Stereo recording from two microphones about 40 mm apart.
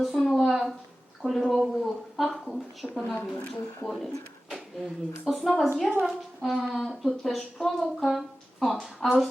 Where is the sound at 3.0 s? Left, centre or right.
Left.